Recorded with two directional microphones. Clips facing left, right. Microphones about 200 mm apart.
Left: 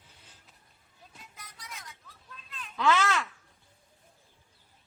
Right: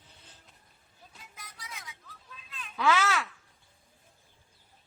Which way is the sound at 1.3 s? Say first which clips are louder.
Right 1 dB; centre (ahead or behind).